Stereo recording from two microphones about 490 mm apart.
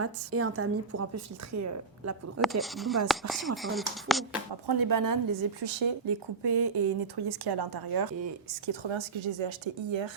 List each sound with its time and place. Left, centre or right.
0.0 s a woman's voice: right
2.4 s speech: centre
4.6 s speech: right
5.5 s speech: right
8.6 s speech: right